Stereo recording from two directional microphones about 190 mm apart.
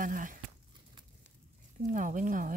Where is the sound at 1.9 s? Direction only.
40° right (ahead or behind).